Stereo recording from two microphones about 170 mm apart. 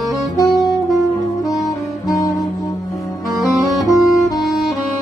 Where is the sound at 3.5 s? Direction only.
Centre (ahead or behind).